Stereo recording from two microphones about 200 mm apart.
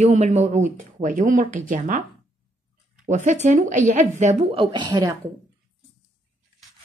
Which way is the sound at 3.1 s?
35° right (ahead or behind).